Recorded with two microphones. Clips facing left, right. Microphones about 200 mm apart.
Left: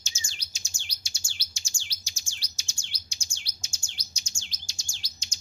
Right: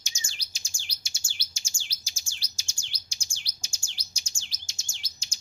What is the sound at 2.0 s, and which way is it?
Chirp, 30° right (ahead or behind).